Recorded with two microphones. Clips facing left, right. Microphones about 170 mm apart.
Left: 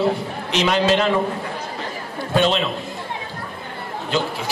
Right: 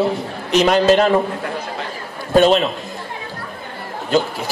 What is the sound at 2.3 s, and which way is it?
Speech, 45° right (ahead or behind).